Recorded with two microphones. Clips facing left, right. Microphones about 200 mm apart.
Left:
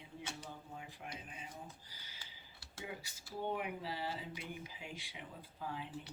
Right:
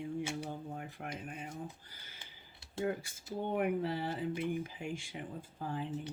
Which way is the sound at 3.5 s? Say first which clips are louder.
Right 9 dB; 55° right (ahead or behind).